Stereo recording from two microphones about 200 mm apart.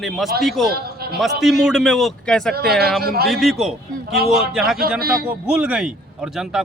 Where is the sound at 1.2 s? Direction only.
Centre (ahead or behind).